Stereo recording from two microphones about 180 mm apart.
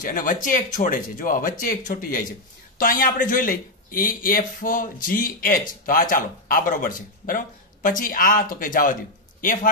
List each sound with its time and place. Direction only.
0.0 s speech: 50° left (ahead or behind)